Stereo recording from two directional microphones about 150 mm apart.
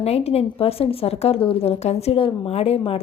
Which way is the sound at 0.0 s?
45° left (ahead or behind).